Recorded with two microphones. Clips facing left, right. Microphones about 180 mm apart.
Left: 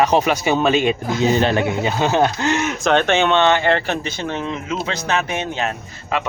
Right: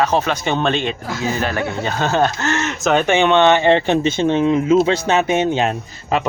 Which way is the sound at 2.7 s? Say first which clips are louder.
Right 3 dB; 5° right (ahead or behind).